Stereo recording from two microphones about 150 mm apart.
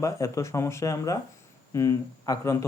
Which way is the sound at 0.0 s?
20° left (ahead or behind).